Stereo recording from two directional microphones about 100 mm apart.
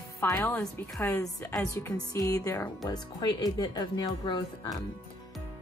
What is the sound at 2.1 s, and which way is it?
A woman's voice, 35° left (ahead or behind).